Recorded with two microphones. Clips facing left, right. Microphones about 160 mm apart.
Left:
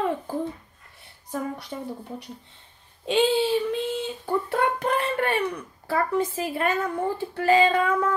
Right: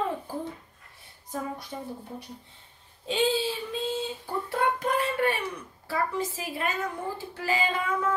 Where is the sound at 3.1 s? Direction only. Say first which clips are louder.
Left 5 dB; 70° left (ahead or behind).